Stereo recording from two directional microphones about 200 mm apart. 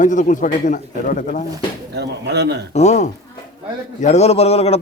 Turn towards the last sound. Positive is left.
turn(degrees=30)  # may be behind; listen again after turning